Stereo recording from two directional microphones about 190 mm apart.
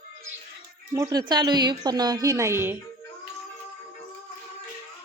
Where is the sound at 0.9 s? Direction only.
15° right (ahead or behind).